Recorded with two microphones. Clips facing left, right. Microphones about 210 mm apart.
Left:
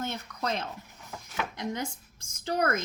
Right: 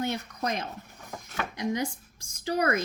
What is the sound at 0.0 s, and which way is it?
Speech, 15° right (ahead or behind).